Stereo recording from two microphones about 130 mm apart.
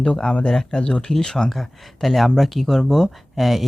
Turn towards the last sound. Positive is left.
turn(degrees=0)  # may be behind; listen again after turning